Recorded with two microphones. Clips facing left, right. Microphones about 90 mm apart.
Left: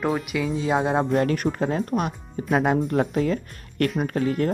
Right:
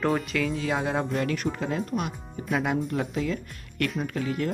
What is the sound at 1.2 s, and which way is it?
Music, 45° left (ahead or behind).